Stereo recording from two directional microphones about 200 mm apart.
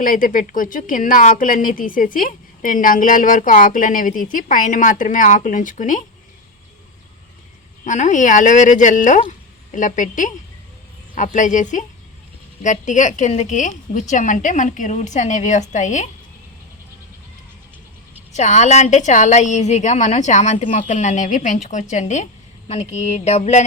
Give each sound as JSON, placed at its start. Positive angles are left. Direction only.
{"t": 0.0, "sound": "a woman's voice", "side_deg": 45}
{"t": 7.9, "sound": "a woman's voice", "side_deg": 35}
{"t": 11.3, "sound": "a woman's voice", "side_deg": 40}
{"t": 18.3, "sound": "a woman's voice", "side_deg": 35}